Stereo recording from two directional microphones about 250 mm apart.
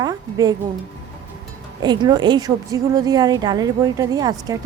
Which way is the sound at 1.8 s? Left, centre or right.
Centre.